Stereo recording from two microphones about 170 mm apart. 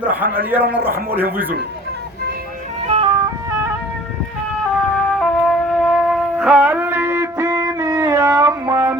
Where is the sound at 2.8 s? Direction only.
35° right (ahead or behind).